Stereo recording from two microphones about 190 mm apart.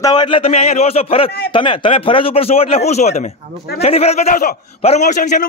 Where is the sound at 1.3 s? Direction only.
55° left (ahead or behind).